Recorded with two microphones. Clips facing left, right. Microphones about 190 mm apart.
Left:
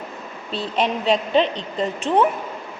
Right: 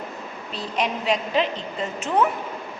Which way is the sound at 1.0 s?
30° left (ahead or behind).